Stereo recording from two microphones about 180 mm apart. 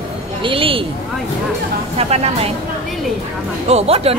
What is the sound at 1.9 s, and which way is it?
Speech, 35° right (ahead or behind).